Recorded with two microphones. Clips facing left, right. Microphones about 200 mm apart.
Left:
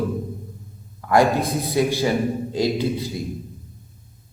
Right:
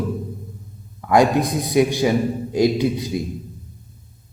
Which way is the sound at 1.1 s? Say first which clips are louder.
Right 2 dB; 20° right (ahead or behind).